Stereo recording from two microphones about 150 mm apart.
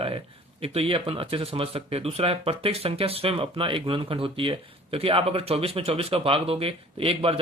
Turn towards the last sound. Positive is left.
turn(degrees=-40)  # may be behind; listen again after turning